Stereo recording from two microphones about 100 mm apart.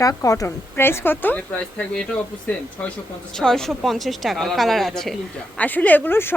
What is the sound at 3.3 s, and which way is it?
Speech, 5° left (ahead or behind).